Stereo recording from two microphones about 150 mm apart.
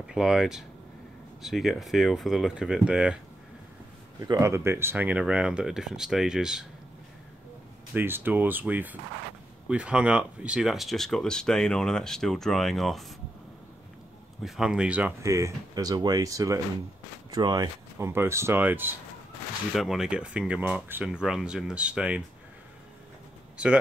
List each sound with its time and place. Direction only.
0.0 s speech: 5° right (ahead or behind)
4.2 s speech: 20° right (ahead or behind); by 6.6 s 5° right (ahead or behind)
7.9 s speech: 15° right (ahead or behind)
14.4 s speech: 5° right (ahead or behind)
19.7 s speech: centre (ahead or behind)